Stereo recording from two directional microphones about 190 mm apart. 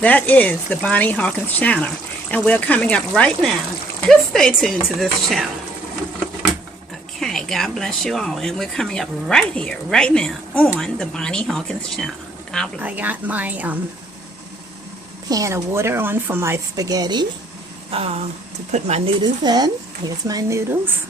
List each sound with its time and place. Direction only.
0.0 s speech: 10° left (ahead or behind)
7.2 s speech: centre (ahead or behind)
12.8 s speech: 10° right (ahead or behind)
15.3 s speech: 15° right (ahead or behind)
17.9 s speech: 35° right (ahead or behind)
19.2 s speech: 20° right (ahead or behind)